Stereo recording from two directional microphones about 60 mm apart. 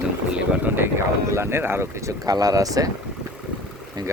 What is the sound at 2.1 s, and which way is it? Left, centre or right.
Speech, right.